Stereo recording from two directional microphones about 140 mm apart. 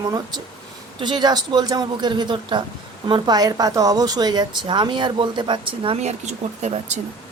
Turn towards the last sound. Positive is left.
turn(degrees=-55)  # may be behind; listen again after turning